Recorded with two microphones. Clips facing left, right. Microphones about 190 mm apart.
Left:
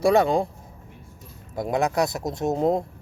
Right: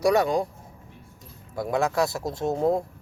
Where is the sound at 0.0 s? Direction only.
25° left (ahead or behind).